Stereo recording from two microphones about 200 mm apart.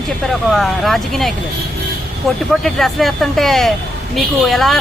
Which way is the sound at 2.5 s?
Centre (ahead or behind).